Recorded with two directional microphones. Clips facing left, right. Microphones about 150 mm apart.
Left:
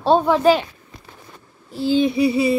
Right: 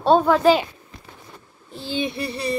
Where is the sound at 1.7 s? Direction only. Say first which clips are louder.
Left 9 dB; centre (ahead or behind).